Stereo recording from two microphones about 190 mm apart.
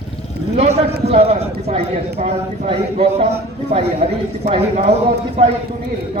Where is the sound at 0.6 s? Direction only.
35° right (ahead or behind).